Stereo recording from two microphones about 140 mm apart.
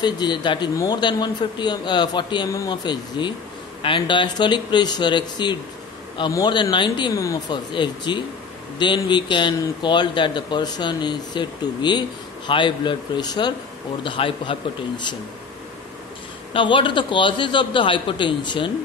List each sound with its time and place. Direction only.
0.0 s speech: 30° left (ahead or behind)
16.5 s speech: 35° left (ahead or behind)